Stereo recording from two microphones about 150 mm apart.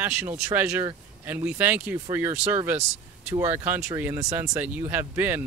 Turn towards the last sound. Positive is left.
turn(degrees=-10)  # may be behind; listen again after turning